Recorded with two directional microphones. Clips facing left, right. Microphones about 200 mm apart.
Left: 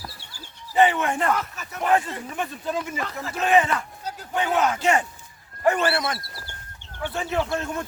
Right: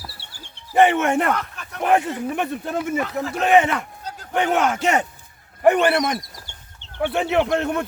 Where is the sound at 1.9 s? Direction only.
65° right (ahead or behind).